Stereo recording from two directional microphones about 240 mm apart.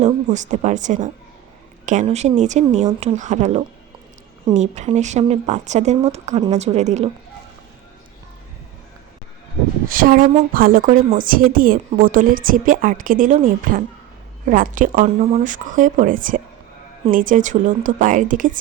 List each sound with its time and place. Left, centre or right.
0.0 s speech: right
9.9 s speech: right